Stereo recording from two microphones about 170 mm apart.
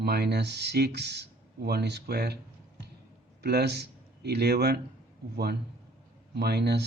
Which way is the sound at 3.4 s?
70° right (ahead or behind).